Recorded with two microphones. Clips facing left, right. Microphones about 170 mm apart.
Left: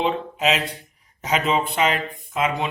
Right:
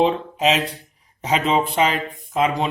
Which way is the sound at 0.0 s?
30° right (ahead or behind).